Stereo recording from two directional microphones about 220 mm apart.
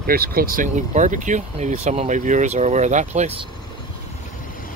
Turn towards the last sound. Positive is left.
turn(degrees=-30)  # may be behind; listen again after turning